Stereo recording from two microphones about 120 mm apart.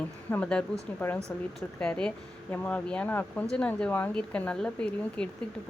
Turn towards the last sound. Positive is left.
turn(degrees=5)  # may be behind; listen again after turning